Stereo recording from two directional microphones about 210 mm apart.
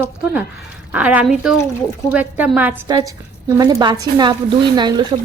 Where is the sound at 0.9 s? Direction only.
5° right (ahead or behind).